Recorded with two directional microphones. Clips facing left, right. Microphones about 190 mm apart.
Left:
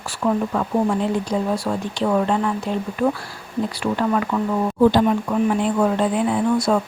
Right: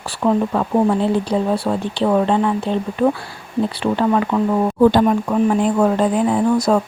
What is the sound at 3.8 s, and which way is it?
Speech, 30° right (ahead or behind).